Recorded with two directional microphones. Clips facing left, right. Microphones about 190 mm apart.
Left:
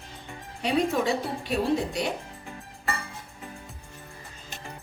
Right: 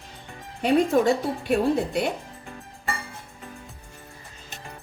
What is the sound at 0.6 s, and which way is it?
A woman's voice, 50° right (ahead or behind).